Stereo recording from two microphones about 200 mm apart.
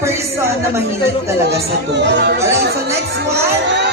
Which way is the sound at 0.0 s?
15° right (ahead or behind).